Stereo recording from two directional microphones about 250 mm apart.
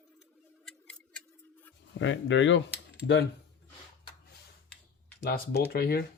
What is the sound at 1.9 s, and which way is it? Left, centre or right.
Speech, left.